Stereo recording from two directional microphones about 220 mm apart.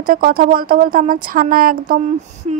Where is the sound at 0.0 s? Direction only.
40° right (ahead or behind).